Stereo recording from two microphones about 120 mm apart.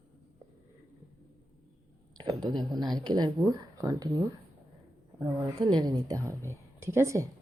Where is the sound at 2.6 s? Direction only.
35° right (ahead or behind).